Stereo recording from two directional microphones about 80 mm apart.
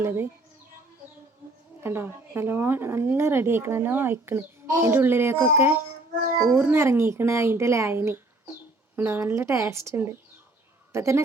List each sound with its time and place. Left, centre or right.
0.0 s a woman's voice: right
1.8 s a woman's voice: right